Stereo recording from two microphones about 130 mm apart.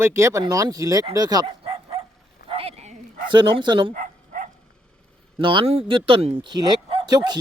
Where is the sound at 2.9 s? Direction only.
90° right.